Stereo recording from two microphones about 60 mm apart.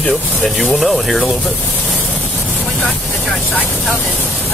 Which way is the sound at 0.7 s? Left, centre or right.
Centre.